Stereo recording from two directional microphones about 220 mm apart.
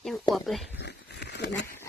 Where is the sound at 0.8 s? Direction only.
50° left (ahead or behind).